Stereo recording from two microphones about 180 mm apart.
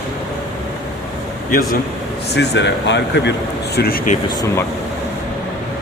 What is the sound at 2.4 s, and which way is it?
Speech, 75° left (ahead or behind).